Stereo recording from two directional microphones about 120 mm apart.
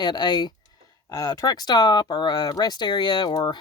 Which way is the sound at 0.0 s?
35° left (ahead or behind).